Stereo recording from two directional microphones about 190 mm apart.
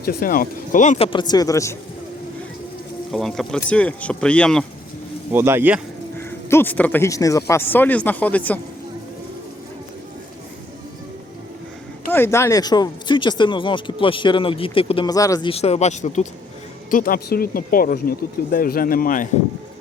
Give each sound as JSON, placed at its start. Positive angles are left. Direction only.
{"t": 0.0, "sound": "speech", "side_deg": 50}
{"t": 3.1, "sound": "speech", "side_deg": 0}
{"t": 5.3, "sound": "speech", "side_deg": -10}
{"t": 6.1, "sound": "speech", "side_deg": 10}
{"t": 12.1, "sound": "speech", "side_deg": 15}
{"t": 16.9, "sound": "speech", "side_deg": 50}